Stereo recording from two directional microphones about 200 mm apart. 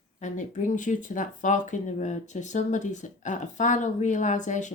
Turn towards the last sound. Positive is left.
turn(degrees=40)  # may be behind; listen again after turning